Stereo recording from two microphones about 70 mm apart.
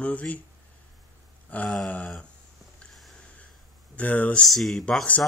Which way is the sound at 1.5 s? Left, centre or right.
Left.